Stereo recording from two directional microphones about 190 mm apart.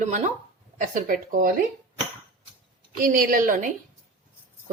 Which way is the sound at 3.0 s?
50° right (ahead or behind).